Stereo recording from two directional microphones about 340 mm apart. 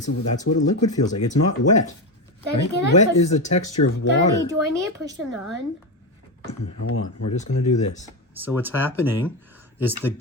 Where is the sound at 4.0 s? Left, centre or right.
Left.